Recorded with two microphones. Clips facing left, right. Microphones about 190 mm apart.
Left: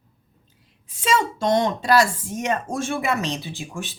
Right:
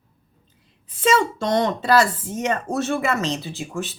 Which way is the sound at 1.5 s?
10° left (ahead or behind).